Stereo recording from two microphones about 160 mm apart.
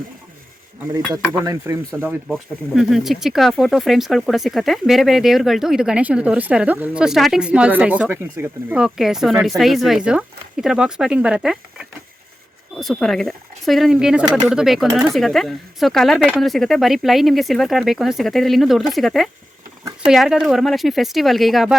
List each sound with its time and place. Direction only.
1.3 s speech: 20° right (ahead or behind)
2.3 s speech: centre (ahead or behind)